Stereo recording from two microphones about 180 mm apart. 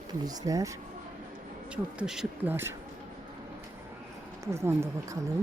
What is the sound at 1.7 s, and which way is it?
Speech, 5° right (ahead or behind).